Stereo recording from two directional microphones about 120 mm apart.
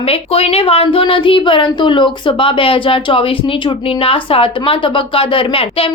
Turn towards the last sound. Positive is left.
turn(degrees=50)  # may be behind; listen again after turning